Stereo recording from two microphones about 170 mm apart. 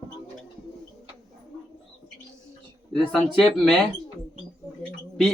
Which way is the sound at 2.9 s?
Centre (ahead or behind).